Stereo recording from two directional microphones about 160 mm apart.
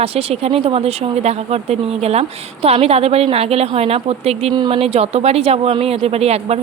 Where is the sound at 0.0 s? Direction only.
40° right (ahead or behind).